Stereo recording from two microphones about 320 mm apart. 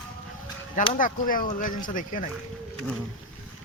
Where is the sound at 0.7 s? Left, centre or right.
Left.